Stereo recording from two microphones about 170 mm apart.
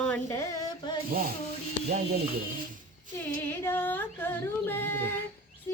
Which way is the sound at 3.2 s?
15° left (ahead or behind).